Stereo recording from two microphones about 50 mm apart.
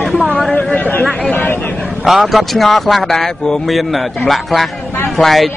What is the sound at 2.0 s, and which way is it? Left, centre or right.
A man's voice, centre.